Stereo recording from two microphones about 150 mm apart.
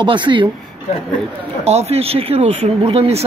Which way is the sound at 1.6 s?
45° right (ahead or behind).